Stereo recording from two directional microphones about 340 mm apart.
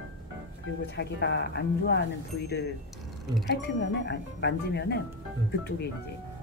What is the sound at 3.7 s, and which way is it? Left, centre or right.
Speech, left.